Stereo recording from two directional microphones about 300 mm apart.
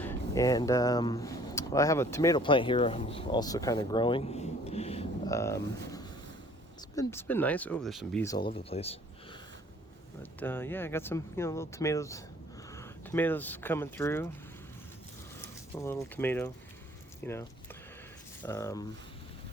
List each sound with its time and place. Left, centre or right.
0.0 s speech: centre
8.4 s speech: centre
10.4 s speech: centre
15.7 s speech: centre
18.4 s speech: centre